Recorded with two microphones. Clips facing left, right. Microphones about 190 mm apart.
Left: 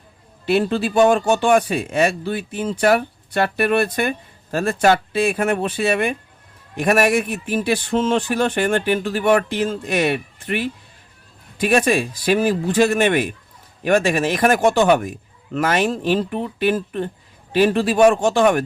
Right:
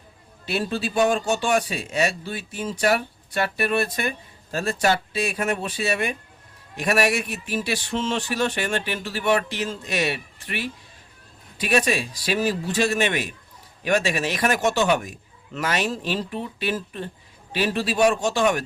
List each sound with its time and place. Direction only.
0.4 s speech: 55° left (ahead or behind)